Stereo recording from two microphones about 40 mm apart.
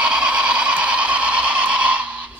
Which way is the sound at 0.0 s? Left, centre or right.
Right.